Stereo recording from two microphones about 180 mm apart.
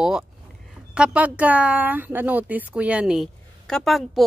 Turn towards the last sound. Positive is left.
turn(degrees=0)  # may be behind; listen again after turning